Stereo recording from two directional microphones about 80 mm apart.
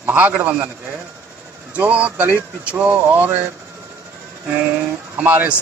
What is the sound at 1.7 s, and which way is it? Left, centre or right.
Speech, centre.